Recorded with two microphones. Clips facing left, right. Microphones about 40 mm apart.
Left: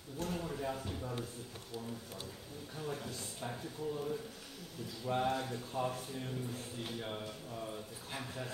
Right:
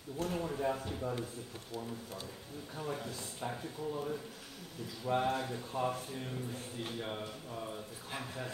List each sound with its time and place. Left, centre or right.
0.2 s a man's voice: centre
2.8 s a man's voice: centre